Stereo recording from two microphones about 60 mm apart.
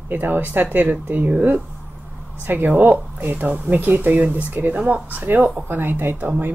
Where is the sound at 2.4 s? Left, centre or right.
Right.